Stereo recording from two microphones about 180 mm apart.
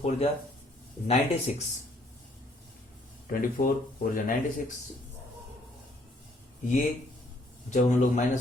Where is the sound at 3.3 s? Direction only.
50° left (ahead or behind).